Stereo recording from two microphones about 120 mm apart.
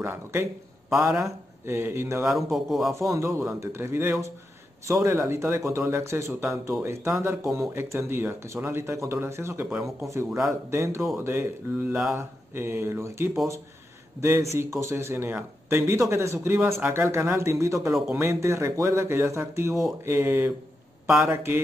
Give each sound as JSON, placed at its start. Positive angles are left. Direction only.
{"t": 0.0, "sound": "a man's voice", "side_deg": -20}
{"t": 2.2, "sound": "a man's voice", "side_deg": 0}
{"t": 2.9, "sound": "a man's voice", "side_deg": -25}
{"t": 9.7, "sound": "speech", "side_deg": -5}
{"t": 10.7, "sound": "a man's voice", "side_deg": -20}